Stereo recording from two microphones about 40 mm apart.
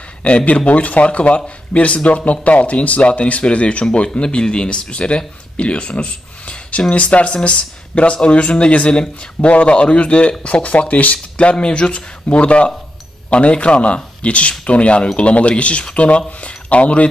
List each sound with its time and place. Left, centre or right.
0.2 s speech: left